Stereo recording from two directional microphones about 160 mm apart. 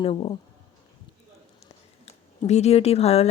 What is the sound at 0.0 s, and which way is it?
Speech, 35° left (ahead or behind).